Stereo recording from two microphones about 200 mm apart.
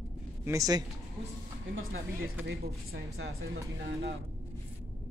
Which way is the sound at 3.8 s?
55° right (ahead or behind).